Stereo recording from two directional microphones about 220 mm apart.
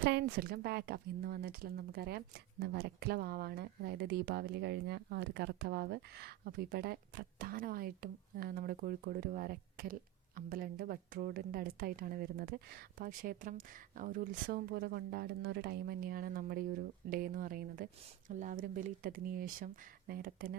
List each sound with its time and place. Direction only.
0.0 s speech: 50° right (ahead or behind)